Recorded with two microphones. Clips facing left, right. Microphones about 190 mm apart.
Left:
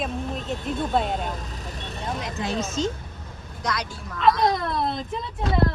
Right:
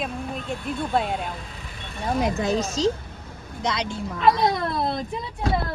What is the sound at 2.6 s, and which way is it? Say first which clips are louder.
A woman's voice: right 3 dB; 35° right (ahead or behind).